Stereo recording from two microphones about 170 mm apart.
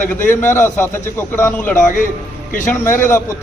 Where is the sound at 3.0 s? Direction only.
15° left (ahead or behind).